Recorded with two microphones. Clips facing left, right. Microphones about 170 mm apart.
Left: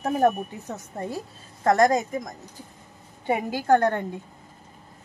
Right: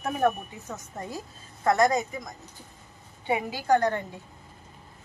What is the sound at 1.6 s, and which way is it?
Speech, 45° left (ahead or behind).